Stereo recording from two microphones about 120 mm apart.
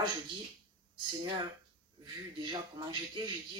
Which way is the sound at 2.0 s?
40° right (ahead or behind).